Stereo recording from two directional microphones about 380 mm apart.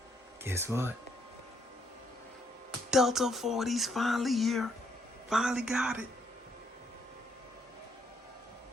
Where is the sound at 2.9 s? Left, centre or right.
Centre.